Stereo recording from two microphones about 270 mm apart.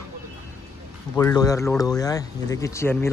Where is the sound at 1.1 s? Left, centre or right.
Centre.